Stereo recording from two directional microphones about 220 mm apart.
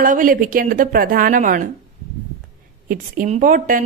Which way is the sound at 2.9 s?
35° right (ahead or behind).